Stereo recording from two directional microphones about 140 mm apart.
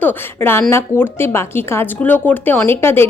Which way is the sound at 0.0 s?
15° left (ahead or behind).